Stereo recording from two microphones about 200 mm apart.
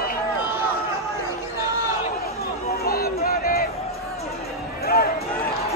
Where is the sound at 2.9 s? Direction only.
50° left (ahead or behind).